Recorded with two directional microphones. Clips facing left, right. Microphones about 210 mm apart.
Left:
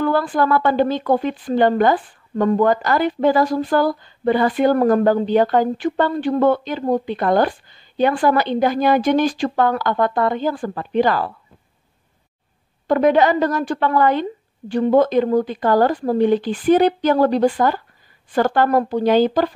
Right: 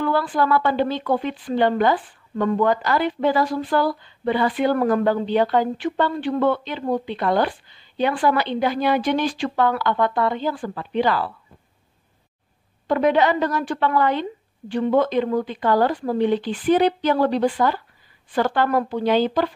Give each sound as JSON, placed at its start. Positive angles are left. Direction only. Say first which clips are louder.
{"t": 0.0, "sound": "speech", "louder": "left 3 dB", "side_deg": 45}
{"t": 12.8, "sound": "speech", "louder": "left 3 dB", "side_deg": 45}